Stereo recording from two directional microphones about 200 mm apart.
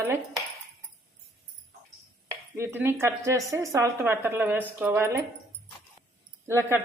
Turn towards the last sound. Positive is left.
turn(degrees=-15)  # may be behind; listen again after turning